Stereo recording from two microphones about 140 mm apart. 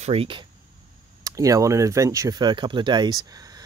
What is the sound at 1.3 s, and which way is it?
Speech, 25° right (ahead or behind).